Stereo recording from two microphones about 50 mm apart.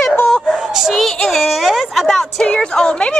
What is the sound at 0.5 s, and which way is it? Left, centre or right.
Speech, centre.